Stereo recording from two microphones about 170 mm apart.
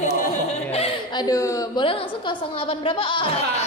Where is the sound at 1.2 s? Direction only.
20° left (ahead or behind).